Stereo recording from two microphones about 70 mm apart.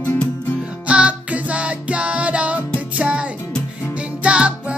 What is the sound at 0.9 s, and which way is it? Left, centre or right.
Music, centre.